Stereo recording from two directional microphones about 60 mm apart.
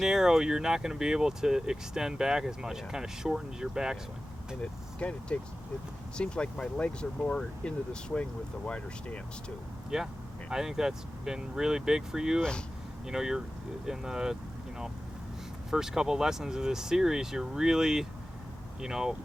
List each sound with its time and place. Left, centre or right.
0.0 s speech: centre
4.9 s speech: left
9.9 s speech: centre
12.4 s speech: centre
13.1 s speech: centre
15.7 s speech: centre